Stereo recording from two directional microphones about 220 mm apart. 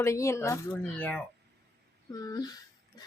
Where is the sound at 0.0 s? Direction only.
15° left (ahead or behind).